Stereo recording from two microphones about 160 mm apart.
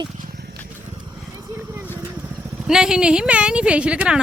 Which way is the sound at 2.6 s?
5° right (ahead or behind).